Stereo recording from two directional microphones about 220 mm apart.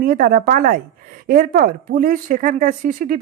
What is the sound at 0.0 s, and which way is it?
Speech, 40° right (ahead or behind).